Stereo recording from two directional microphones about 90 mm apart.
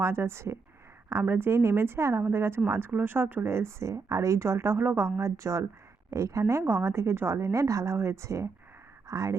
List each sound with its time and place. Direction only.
0.0 s speech: 30° right (ahead or behind)